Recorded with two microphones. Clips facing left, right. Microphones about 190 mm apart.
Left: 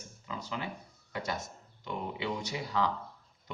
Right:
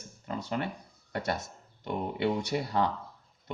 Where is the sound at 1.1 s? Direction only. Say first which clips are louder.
Right 4 dB; 60° right (ahead or behind).